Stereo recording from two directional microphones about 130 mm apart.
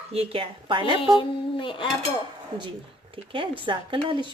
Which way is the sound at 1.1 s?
40° left (ahead or behind).